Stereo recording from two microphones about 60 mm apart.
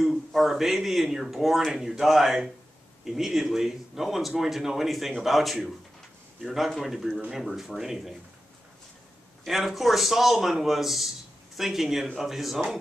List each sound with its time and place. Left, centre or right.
0.0 s speech: centre
9.4 s speech: centre